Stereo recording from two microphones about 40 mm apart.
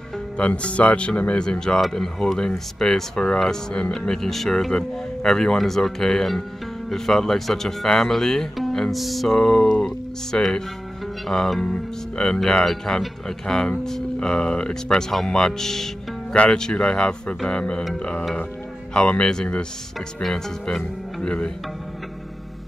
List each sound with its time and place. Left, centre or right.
0.4 s speech: left
1.4 s speech: centre
1.8 s speech: centre
8.9 s music: centre
9.4 s speech: centre
12.4 s speech: centre
14.9 s speech: centre
20.2 s speech: centre
21.2 s speech: left